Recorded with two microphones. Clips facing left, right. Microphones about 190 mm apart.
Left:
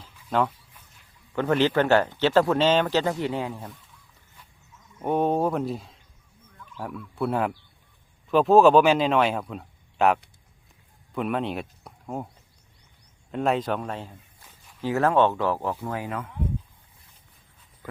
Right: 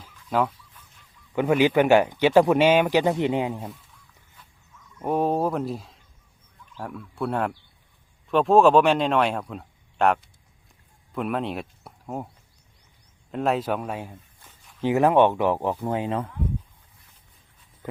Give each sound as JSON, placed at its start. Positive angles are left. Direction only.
{"t": 0.3, "sound": "speech", "side_deg": -5}
{"t": 5.0, "sound": "speech", "side_deg": 0}
{"t": 13.3, "sound": "speech", "side_deg": 0}